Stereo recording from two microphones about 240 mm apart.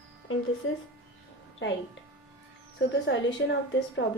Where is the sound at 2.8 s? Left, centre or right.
Left.